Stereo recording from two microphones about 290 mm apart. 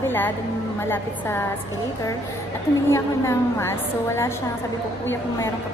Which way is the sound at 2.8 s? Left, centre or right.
Centre.